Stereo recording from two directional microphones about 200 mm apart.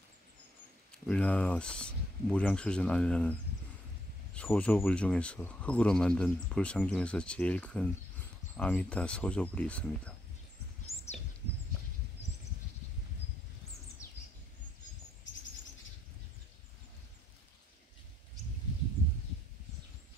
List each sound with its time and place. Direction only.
1.0 s speech: 5° left (ahead or behind)
10.9 s a sound: 30° left (ahead or behind)
14.0 s bird: 15° left (ahead or behind)